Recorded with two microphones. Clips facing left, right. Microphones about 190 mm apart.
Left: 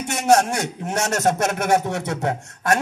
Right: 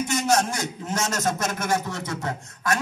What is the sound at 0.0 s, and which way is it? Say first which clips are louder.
A man's voice: left 5 dB; 65° left (ahead or behind).